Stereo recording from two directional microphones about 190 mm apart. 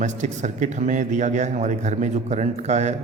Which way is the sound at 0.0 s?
40° right (ahead or behind).